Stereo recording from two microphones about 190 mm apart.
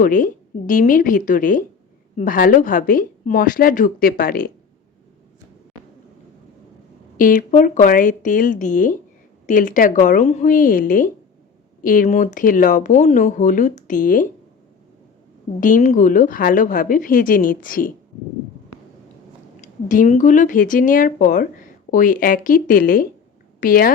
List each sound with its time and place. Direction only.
0.0 s speech: 45° left (ahead or behind)
7.2 s speech: 45° left (ahead or behind)
15.6 s speech: 40° left (ahead or behind)
19.6 s a woman's voice: 40° left (ahead or behind)